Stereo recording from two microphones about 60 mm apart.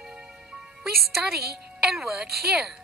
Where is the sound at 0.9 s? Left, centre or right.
Centre.